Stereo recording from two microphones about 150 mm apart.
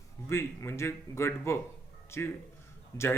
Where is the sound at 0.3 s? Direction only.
15° left (ahead or behind).